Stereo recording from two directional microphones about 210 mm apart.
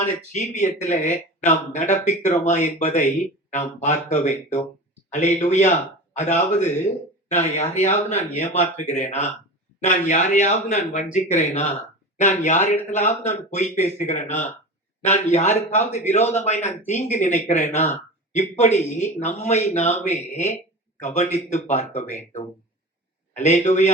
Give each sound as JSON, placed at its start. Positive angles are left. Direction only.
{"t": 0.3, "sound": "speech", "side_deg": 35}
{"t": 23.3, "sound": "speech", "side_deg": 35}